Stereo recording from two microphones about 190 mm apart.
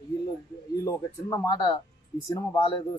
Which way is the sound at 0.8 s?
15° left (ahead or behind).